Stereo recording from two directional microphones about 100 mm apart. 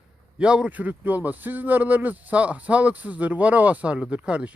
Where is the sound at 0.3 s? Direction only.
10° right (ahead or behind).